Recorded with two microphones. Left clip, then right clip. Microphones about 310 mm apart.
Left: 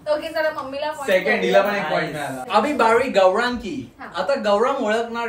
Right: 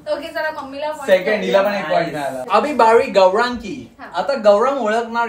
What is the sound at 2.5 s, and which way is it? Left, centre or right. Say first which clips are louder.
A woman's voice: right 4 dB; centre.